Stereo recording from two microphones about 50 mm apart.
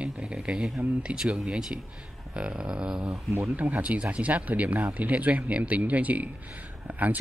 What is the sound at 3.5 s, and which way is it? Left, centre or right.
Speech, right.